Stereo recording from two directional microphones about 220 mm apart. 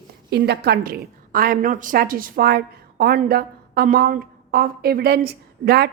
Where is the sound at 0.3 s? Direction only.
50° right (ahead or behind).